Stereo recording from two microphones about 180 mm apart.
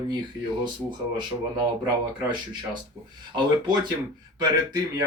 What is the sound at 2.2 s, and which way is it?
Speech, 25° right (ahead or behind).